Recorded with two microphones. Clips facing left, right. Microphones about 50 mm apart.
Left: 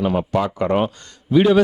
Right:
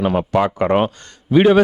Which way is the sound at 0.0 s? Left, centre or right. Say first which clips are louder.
Right 3 dB; right.